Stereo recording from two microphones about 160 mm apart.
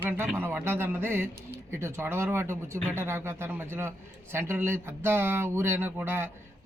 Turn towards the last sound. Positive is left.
turn(degrees=-15)  # may be behind; listen again after turning